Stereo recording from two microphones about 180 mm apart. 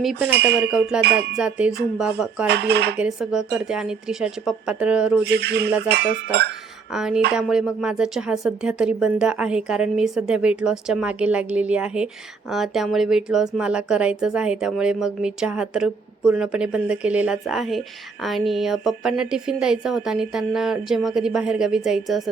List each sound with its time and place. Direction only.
0.9 s speech: 5° right (ahead or behind)
1.4 s music: 5° right (ahead or behind)
2.5 s a sound: 65° right (ahead or behind)
3.0 s speech: 5° right (ahead or behind)
5.2 s a sound: 70° right (ahead or behind)
6.9 s speech: 5° right (ahead or behind)